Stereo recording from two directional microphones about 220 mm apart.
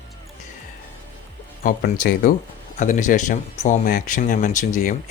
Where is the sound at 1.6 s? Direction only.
40° left (ahead or behind).